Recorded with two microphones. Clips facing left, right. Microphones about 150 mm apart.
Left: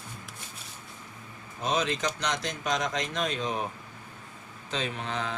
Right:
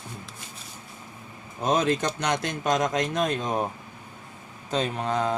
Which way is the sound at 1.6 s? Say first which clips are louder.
Right 5 dB; 50° right (ahead or behind).